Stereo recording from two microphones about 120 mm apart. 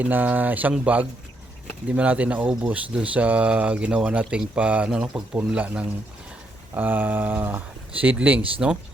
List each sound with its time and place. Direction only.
0.0 s speech: 15° right (ahead or behind)